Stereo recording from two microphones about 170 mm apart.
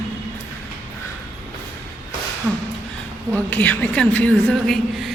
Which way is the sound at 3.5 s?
10° left (ahead or behind).